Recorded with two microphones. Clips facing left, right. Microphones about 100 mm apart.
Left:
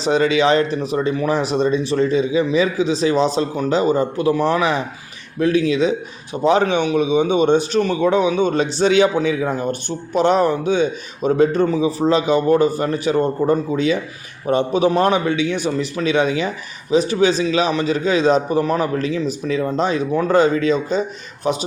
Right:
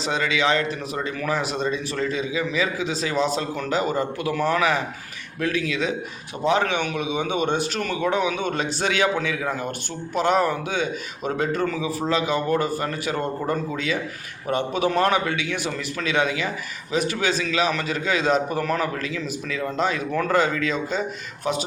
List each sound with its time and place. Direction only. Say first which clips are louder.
0.0 s speech: left 7 dB; 35° left (ahead or behind)
18.6 s speech: left 5 dB; 20° left (ahead or behind)
18.9 s speech: left 8 dB; 30° left (ahead or behind)